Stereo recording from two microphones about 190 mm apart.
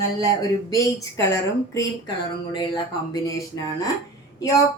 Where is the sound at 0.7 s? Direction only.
15° left (ahead or behind).